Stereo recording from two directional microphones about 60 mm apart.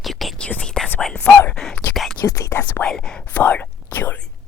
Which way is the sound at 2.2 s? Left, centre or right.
Left.